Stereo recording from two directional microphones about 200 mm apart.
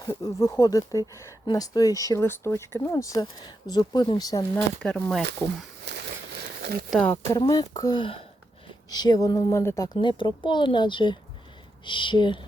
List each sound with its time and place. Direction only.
0.0 s speech: 15° left (ahead or behind)
4.8 s speech: 5° left (ahead or behind)
5.8 s a sound: 55° right (ahead or behind)
6.9 s speech: 5° left (ahead or behind)
7.3 s speech: 15° left (ahead or behind)